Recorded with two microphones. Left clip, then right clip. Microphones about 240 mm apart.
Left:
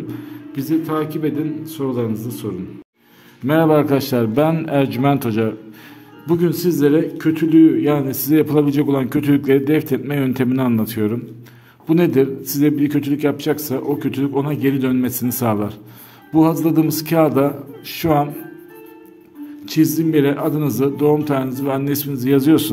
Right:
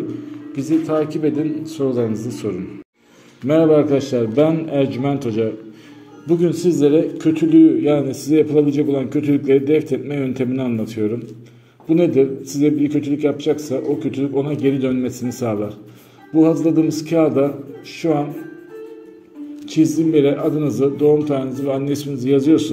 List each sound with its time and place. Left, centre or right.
0.6 s a man's voice: centre
3.4 s a man's voice: left
19.6 s a man's voice: left